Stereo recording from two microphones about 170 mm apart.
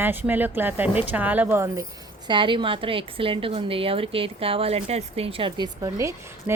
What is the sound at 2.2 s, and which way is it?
A woman's voice, 30° right (ahead or behind).